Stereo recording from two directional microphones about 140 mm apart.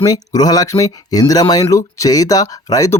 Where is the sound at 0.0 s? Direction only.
25° left (ahead or behind).